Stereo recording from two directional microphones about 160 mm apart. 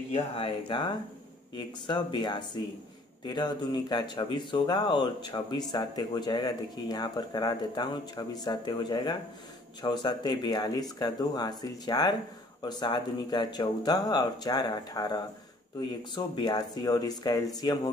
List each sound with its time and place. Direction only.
0.1 s speech: 35° left (ahead or behind)